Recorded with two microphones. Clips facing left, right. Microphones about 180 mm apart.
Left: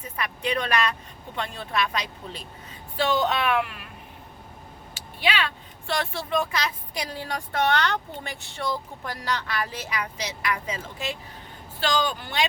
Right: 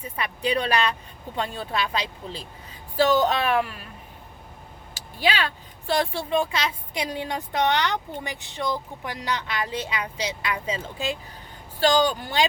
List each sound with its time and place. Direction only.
0.2 s speech: 30° right (ahead or behind)
5.2 s a woman's voice: 35° right (ahead or behind)